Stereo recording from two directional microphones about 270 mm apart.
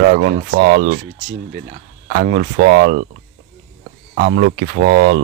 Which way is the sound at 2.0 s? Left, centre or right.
Right.